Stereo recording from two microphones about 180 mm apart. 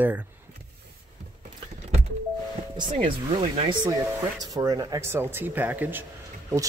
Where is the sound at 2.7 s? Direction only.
25° right (ahead or behind).